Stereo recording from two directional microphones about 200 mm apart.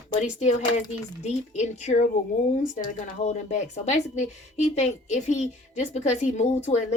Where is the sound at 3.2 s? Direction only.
35° left (ahead or behind).